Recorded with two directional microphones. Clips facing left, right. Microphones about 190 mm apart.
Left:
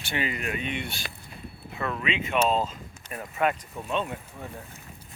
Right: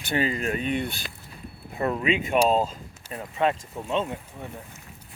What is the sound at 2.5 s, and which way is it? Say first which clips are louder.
Speech: right 3 dB; 40° right (ahead or behind).